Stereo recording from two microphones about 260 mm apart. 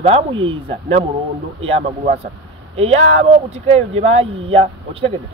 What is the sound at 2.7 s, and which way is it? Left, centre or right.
Speech, right.